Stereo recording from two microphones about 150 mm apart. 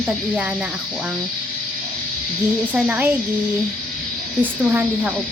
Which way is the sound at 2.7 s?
10° right (ahead or behind).